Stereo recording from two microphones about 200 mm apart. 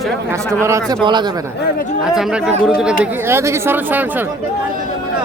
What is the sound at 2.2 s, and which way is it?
A man's voice, centre (ahead or behind).